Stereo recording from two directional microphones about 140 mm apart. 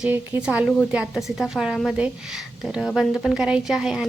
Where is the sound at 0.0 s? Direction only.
10° right (ahead or behind).